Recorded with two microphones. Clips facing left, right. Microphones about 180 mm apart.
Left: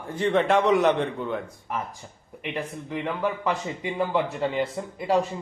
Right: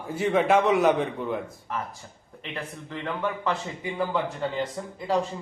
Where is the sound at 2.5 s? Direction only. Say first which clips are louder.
Left 4 dB; 15° left (ahead or behind).